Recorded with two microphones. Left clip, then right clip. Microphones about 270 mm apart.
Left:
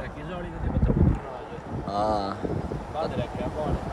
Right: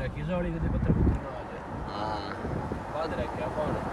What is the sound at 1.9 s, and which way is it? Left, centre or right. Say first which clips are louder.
Speech: left 8 dB; centre.